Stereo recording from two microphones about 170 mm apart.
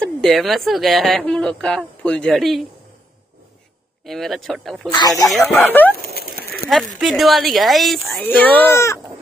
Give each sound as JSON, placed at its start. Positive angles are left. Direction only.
{"t": 0.0, "sound": "a woman's voice", "side_deg": 0}
{"t": 4.0, "sound": "a woman's voice", "side_deg": 0}
{"t": 5.6, "sound": "speech", "side_deg": 10}
{"t": 5.9, "sound": "bird", "side_deg": 65}
{"t": 6.3, "sound": "bird", "side_deg": 0}
{"t": 7.0, "sound": "a woman's voice", "side_deg": 0}